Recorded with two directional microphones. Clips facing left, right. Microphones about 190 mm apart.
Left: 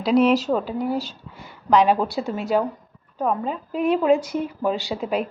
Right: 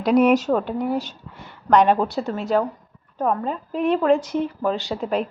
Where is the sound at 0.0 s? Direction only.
5° left (ahead or behind).